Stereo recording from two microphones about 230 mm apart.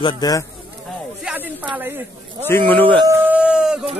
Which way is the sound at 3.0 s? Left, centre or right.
Centre.